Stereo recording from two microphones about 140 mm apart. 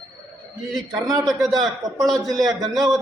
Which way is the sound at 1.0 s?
25° right (ahead or behind).